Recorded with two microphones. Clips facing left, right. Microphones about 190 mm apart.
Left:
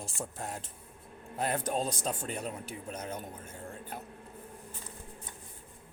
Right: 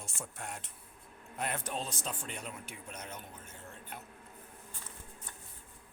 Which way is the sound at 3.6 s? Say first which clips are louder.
Left 6 dB; 45° left (ahead or behind).